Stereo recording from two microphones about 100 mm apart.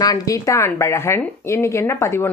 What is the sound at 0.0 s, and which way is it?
Speech, 35° left (ahead or behind).